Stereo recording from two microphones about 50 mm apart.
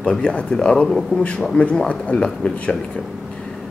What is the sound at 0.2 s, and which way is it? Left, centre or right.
Speech, left.